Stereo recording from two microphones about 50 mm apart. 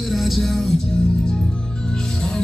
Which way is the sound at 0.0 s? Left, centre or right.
Centre.